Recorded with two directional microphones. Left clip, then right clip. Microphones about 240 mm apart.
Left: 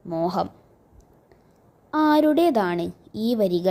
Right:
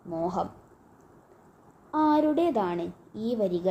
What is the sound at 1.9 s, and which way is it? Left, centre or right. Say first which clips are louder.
A woman's voice: left 5 dB; left.